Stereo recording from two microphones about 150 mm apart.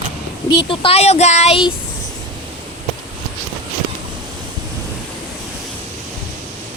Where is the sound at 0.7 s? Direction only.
40° left (ahead or behind).